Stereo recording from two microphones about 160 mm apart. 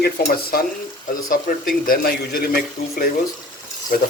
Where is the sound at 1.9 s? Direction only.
75° left (ahead or behind).